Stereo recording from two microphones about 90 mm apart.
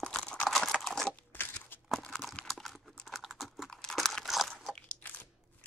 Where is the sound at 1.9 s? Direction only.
5° left (ahead or behind).